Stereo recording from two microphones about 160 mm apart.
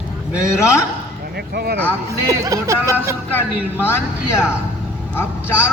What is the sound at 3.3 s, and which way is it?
A man's voice, 15° left (ahead or behind).